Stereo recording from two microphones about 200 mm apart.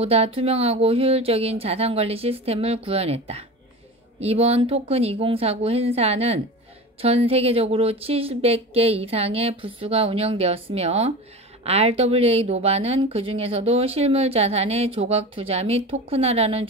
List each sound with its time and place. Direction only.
0.0 s a woman's voice: 30° right (ahead or behind)